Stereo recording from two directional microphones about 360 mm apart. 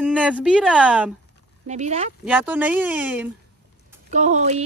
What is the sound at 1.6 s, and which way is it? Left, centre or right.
Speech, centre.